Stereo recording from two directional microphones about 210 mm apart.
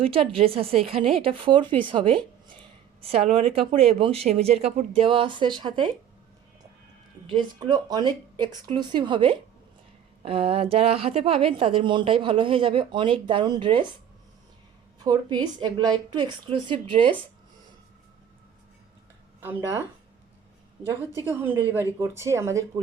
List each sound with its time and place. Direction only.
0.0 s speech: 25° right (ahead or behind)
7.3 s speech: 20° right (ahead or behind)
14.9 s speech: 20° right (ahead or behind)
19.4 s speech: 10° right (ahead or behind)
21.2 s speech: 10° right (ahead or behind)